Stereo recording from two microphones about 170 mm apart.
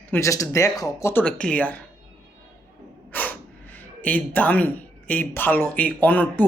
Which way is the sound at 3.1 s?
10° left (ahead or behind).